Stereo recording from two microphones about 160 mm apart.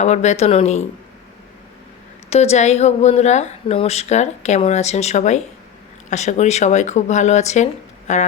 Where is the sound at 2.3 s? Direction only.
40° left (ahead or behind).